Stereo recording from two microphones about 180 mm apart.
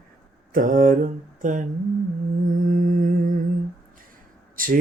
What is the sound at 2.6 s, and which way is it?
Mantra, 50° right (ahead or behind).